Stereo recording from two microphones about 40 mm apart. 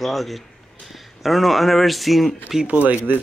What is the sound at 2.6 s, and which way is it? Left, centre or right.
Speech, right.